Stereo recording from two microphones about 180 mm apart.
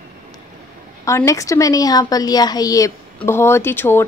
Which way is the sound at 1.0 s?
15° left (ahead or behind).